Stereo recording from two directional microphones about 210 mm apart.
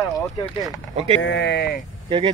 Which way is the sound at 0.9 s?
30° right (ahead or behind).